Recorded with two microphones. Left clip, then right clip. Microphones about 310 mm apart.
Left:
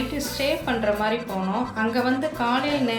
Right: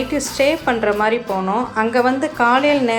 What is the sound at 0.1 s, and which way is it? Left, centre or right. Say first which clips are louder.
Speech: right 10 dB; centre.